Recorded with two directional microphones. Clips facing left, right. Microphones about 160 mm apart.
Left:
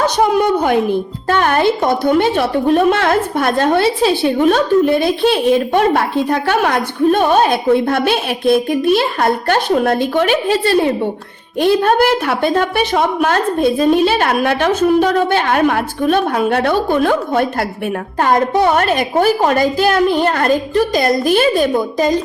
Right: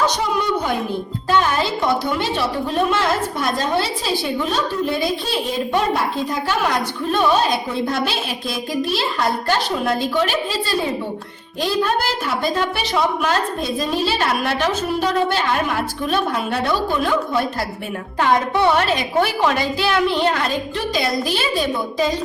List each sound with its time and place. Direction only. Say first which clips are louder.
0.0 s a woman's voice: left 7 dB; 55° left (ahead or behind)